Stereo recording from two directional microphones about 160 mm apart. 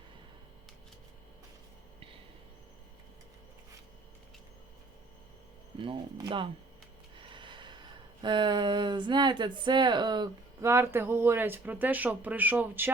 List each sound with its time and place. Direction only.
5.8 s speech: 30° right (ahead or behind)
10.7 s speech: 15° right (ahead or behind)